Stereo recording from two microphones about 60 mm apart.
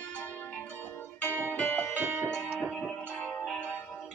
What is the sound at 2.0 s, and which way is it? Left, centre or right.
Music, right.